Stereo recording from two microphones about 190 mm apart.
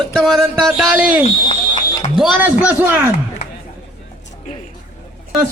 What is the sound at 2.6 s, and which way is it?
Speech, 10° right (ahead or behind).